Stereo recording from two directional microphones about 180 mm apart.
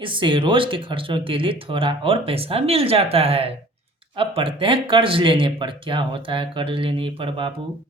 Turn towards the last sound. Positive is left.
turn(degrees=-30)  # may be behind; listen again after turning